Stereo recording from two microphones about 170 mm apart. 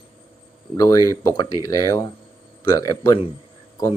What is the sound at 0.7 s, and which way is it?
Speech, 20° left (ahead or behind).